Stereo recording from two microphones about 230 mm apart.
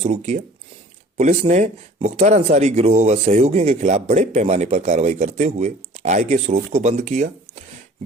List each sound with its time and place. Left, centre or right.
0.0 s speech: right